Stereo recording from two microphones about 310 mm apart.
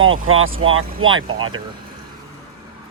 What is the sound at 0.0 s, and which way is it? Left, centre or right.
Speech, right.